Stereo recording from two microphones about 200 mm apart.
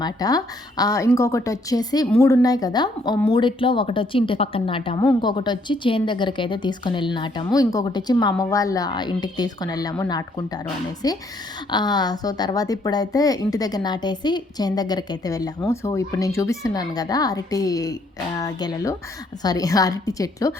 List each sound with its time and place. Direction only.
0.0 s a woman's voice: 20° left (ahead or behind)